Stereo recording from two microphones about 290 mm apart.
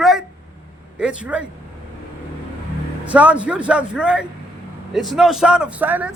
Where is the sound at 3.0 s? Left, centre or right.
Centre.